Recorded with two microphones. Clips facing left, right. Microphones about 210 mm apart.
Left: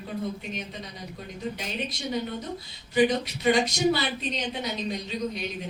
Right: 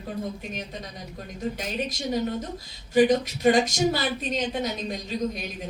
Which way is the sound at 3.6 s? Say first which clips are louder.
Even; 45° right (ahead or behind).